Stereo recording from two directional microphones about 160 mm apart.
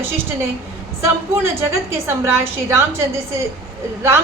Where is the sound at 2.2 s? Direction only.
15° right (ahead or behind).